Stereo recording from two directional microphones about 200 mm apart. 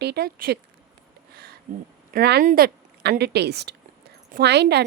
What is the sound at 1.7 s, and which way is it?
A woman's voice, 45° right (ahead or behind).